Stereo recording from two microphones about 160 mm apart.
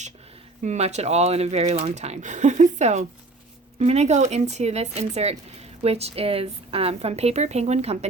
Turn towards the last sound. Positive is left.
turn(degrees=-40)  # may be behind; listen again after turning